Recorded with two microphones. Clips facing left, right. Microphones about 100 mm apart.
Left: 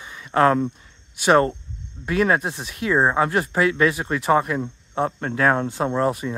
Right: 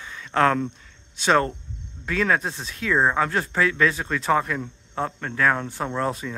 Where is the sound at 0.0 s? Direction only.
10° left (ahead or behind).